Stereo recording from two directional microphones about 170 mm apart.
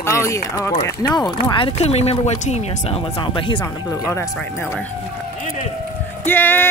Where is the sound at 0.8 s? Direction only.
25° left (ahead or behind); by 2.9 s 40° left (ahead or behind).